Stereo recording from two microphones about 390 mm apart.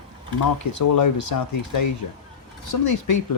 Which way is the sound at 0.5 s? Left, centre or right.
Left.